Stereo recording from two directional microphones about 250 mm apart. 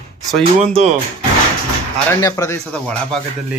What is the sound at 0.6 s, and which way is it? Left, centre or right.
Speech, right.